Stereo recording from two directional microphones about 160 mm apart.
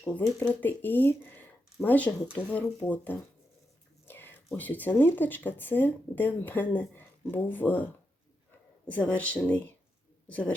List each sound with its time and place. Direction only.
0.0 s speech: 10° left (ahead or behind)
8.9 s speech: 10° left (ahead or behind)